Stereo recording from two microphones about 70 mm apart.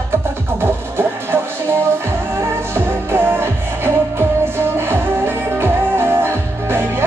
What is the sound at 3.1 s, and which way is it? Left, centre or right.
Music, right.